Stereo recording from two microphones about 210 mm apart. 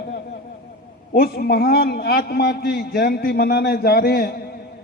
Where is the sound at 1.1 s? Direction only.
45° left (ahead or behind).